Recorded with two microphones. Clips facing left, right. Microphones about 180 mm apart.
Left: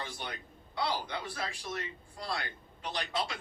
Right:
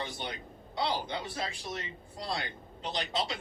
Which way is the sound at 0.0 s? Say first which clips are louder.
Right 3 dB; 25° right (ahead or behind).